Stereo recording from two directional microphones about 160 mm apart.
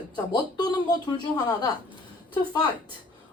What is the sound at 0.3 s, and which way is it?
Speech, 25° left (ahead or behind).